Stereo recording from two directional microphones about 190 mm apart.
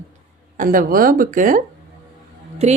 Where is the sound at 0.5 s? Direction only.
45° right (ahead or behind).